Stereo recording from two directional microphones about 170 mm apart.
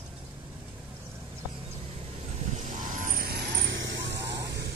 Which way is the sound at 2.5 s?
45° right (ahead or behind).